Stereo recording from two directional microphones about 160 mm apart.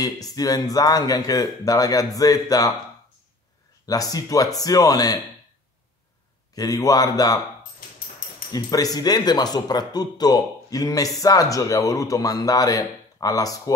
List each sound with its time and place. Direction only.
0.0 s speech: 25° left (ahead or behind)
3.8 s speech: 25° left (ahead or behind)
6.5 s speech: 20° left (ahead or behind)
8.5 s speech: 25° left (ahead or behind)